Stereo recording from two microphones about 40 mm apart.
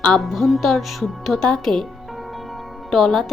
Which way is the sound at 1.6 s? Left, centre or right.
Centre.